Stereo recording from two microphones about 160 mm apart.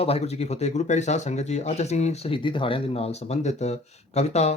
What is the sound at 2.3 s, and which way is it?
Speech, 30° left (ahead or behind).